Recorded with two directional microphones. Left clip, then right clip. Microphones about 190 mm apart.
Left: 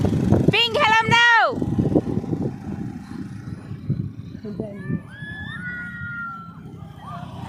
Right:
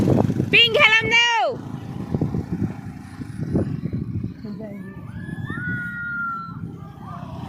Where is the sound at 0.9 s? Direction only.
25° left (ahead or behind).